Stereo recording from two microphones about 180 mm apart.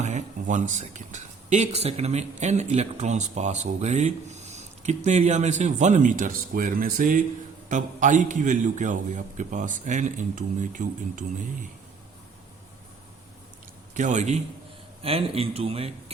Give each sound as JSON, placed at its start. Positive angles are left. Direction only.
{"t": 0.0, "sound": "a man's voice", "side_deg": -40}
{"t": 13.9, "sound": "a man's voice", "side_deg": -45}